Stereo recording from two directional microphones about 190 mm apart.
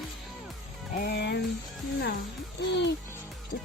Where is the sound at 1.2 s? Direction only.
65° left (ahead or behind).